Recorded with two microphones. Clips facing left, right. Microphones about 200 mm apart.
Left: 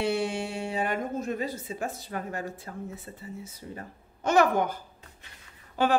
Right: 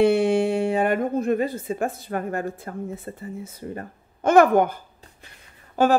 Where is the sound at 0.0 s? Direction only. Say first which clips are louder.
Right 10 dB; 55° right (ahead or behind).